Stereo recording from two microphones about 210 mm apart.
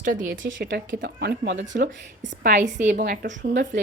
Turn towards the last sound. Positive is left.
turn(degrees=-35)  # may be behind; listen again after turning